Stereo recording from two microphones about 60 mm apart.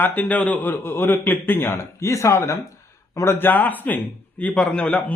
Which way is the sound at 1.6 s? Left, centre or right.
Left.